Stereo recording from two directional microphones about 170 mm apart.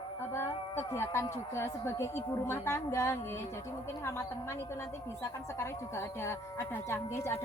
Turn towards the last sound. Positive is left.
turn(degrees=15)  # may be behind; listen again after turning